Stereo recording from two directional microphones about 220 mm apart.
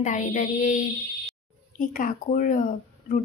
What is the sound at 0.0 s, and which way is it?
A woman's voice, 35° left (ahead or behind).